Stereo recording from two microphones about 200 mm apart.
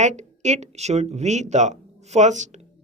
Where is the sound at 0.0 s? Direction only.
35° right (ahead or behind).